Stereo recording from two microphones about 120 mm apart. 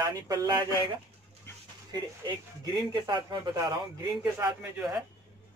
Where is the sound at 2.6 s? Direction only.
35° right (ahead or behind).